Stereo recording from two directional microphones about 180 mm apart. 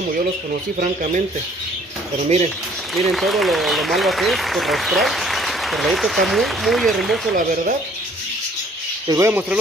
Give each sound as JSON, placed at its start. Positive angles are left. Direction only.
{"t": 2.2, "sound": "speech", "side_deg": -40}
{"t": 2.9, "sound": "speech", "side_deg": 0}
{"t": 9.0, "sound": "speech", "side_deg": -20}